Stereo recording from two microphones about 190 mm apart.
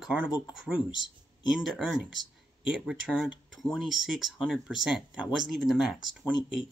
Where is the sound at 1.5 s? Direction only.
Centre (ahead or behind).